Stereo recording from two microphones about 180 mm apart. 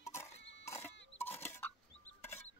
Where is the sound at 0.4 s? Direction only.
80° left.